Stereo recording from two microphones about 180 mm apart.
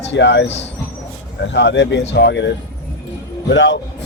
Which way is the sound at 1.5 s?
80° left.